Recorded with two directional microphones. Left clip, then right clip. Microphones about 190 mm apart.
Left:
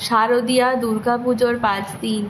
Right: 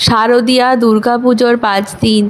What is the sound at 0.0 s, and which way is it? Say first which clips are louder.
A woman's voice: right 7 dB; 45° right (ahead or behind).